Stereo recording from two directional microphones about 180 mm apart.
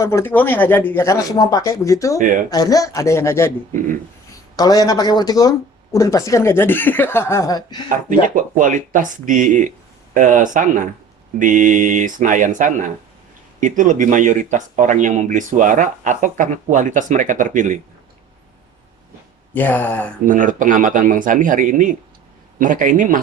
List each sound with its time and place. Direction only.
0.0 s speech: 15° left (ahead or behind)
4.5 s speech: 20° left (ahead or behind)
8.5 s speech: 45° right (ahead or behind)
19.5 s speech: 10° left (ahead or behind)
20.2 s speech: 45° right (ahead or behind)